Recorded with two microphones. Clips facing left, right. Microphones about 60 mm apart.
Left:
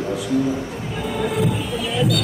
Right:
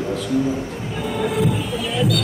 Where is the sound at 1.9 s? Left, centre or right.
Centre.